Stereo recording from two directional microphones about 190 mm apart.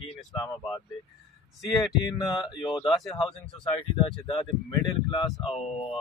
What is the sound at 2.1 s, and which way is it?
Speech, 25° left (ahead or behind).